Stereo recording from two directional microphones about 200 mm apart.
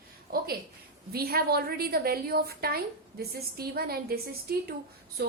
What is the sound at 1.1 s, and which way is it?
A woman's voice, 50° right (ahead or behind).